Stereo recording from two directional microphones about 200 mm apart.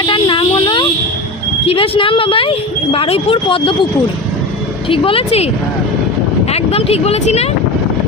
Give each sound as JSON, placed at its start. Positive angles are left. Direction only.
{"t": 0.0, "sound": "a sound", "side_deg": 25}
{"t": 1.6, "sound": "speech", "side_deg": 30}
{"t": 4.9, "sound": "speech", "side_deg": 25}
{"t": 6.5, "sound": "speech", "side_deg": 30}